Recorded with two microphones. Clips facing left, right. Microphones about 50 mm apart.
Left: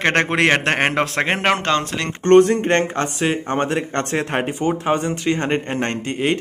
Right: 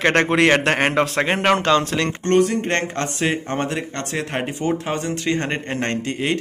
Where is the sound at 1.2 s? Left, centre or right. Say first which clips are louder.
Even; left.